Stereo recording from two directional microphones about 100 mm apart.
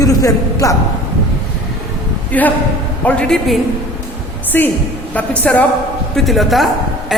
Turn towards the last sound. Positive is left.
turn(degrees=0)  # may be behind; listen again after turning